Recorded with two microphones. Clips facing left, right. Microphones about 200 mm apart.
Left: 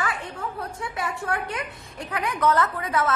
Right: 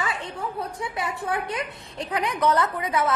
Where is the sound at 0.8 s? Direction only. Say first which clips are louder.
Right 1 dB; 20° right (ahead or behind).